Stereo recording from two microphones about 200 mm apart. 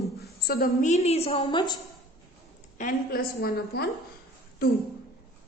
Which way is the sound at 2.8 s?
45° left (ahead or behind).